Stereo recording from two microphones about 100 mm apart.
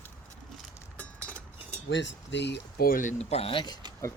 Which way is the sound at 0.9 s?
15° left (ahead or behind).